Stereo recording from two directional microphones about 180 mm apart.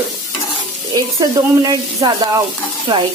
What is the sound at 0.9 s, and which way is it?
Speech, 25° right (ahead or behind).